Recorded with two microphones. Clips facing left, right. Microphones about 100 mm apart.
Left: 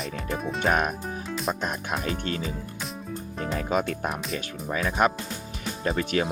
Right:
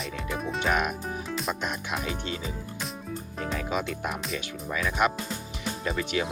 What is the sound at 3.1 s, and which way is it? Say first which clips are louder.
Music: left 2 dB; centre (ahead or behind).